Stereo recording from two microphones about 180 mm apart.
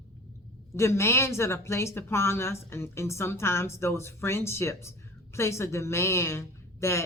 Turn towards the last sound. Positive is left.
turn(degrees=15)  # may be behind; listen again after turning